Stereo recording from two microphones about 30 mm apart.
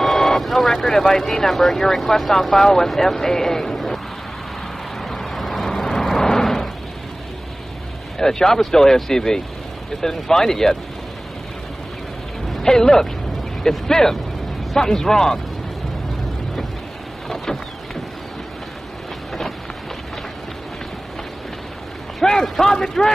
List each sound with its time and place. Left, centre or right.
0.0 s vehicle: centre
0.4 s vehicle: centre
0.7 s a man's voice: centre
5.0 s vehicle: centre
8.2 s speech: centre
12.6 s speech: centre
22.4 s speech: centre